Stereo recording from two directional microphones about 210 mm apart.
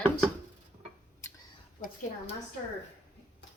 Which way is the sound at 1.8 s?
35° left (ahead or behind).